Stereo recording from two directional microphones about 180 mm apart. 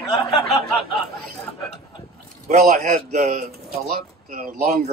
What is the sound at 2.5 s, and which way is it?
Speech, 40° right (ahead or behind).